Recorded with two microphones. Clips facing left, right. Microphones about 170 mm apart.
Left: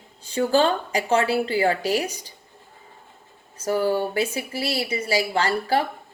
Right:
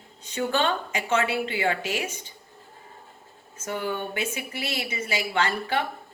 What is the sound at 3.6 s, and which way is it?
A woman's voice, 35° left (ahead or behind).